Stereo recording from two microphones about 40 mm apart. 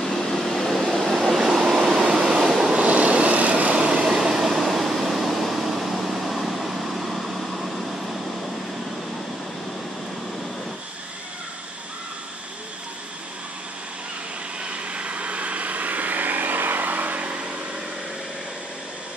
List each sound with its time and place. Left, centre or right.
0.0 s vehicle: centre
1.0 s train: centre
2.0 s vehicle: centre
2.7 s vehicle: right
3.8 s air conditioning: centre
14.6 s vehicle: right
17.3 s a sound: right